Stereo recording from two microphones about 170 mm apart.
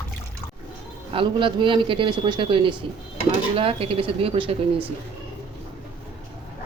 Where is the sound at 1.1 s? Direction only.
30° right (ahead or behind).